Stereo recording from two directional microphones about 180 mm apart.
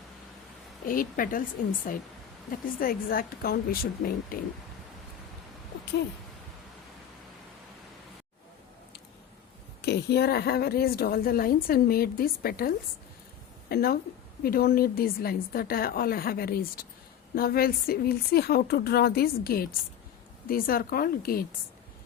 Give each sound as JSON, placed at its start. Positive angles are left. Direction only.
{"t": 0.9, "sound": "speech", "side_deg": 50}
{"t": 9.8, "sound": "a woman's voice", "side_deg": 65}